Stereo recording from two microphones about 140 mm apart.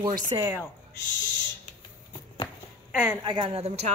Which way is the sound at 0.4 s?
15° right (ahead or behind).